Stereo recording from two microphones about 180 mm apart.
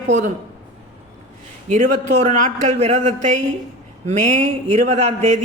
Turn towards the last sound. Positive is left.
turn(degrees=-40)  # may be behind; listen again after turning